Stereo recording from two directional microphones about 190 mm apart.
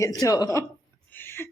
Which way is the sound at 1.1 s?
10° left (ahead or behind).